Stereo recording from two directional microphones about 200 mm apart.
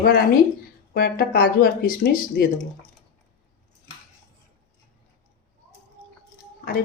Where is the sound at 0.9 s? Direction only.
50° left (ahead or behind).